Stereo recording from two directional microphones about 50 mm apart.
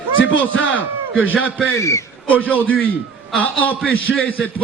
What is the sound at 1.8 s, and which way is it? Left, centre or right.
Speech, left.